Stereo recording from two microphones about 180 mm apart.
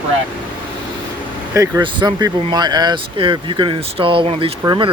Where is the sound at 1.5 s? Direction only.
20° right (ahead or behind).